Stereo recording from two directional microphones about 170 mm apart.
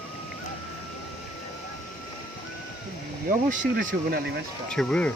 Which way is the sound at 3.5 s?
50° right (ahead or behind).